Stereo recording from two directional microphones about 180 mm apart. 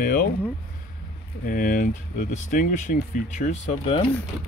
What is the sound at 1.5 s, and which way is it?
Speech, 50° left (ahead or behind).